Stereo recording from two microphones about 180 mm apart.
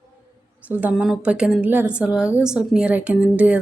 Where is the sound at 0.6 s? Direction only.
10° right (ahead or behind).